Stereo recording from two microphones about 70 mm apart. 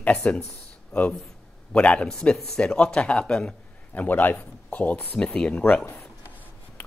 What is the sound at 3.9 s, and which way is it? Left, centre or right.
Speech, left.